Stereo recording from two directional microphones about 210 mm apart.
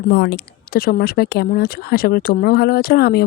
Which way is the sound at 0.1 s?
55° left (ahead or behind).